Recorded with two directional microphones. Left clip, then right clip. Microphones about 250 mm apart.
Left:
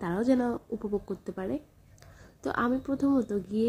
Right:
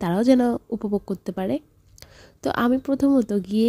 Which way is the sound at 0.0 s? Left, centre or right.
Right.